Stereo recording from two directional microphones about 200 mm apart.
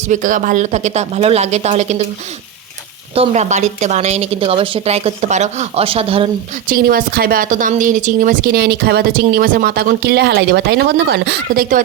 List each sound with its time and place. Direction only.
0.0 s a woman's voice: 40° right (ahead or behind)
3.2 s a woman's voice: 35° right (ahead or behind)
6.7 s speech: 45° right (ahead or behind)